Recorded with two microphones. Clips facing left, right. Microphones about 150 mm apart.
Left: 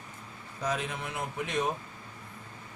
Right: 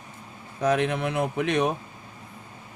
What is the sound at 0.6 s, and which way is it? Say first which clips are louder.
A man's voice: right 10 dB; 70° right (ahead or behind).